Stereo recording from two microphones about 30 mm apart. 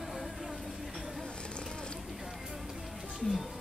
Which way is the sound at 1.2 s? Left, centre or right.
Left.